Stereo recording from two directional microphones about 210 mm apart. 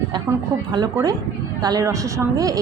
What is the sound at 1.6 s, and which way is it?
A woman's voice, 20° right (ahead or behind).